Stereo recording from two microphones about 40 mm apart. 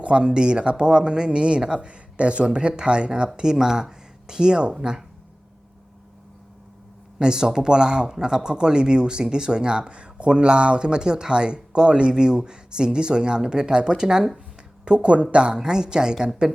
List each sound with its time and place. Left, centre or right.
0.0 s speech: right
7.2 s speech: centre
14.8 s speech: right